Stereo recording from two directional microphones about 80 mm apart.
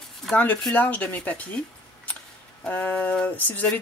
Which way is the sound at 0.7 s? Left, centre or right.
Centre.